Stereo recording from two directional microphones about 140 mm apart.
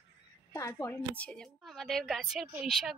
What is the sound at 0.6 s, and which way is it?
Speech, 25° left (ahead or behind).